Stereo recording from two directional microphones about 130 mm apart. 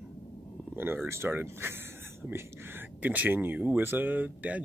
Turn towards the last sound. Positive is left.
turn(degrees=-10)  # may be behind; listen again after turning